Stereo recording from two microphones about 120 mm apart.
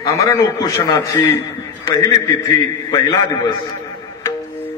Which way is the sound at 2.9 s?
30° left (ahead or behind).